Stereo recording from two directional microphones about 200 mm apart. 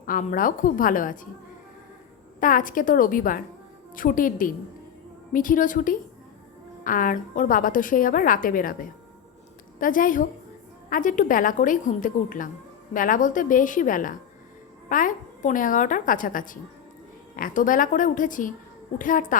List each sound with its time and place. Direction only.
0.0 s a woman's voice: 40° left (ahead or behind)
2.4 s a woman's voice: 40° left (ahead or behind)